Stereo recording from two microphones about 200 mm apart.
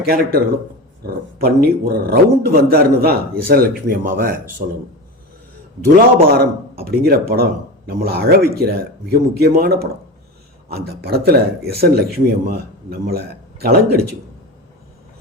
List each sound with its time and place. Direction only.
0.0 s speech: 50° right (ahead or behind)
6.3 s speech: 50° right (ahead or behind)